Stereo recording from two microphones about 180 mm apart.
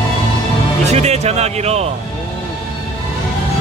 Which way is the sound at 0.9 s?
35° right (ahead or behind).